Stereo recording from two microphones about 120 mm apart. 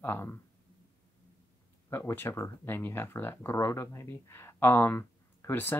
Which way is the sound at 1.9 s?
20° left (ahead or behind).